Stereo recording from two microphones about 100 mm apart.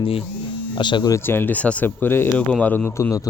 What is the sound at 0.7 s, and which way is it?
Speech, 50° left (ahead or behind).